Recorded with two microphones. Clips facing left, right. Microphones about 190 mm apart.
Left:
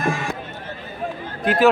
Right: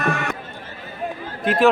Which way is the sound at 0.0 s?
65° right (ahead or behind).